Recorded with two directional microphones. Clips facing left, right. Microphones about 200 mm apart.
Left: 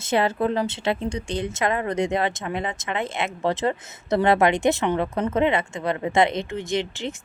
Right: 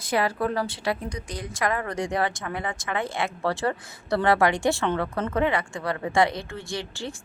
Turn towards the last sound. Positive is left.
turn(degrees=20)  # may be behind; listen again after turning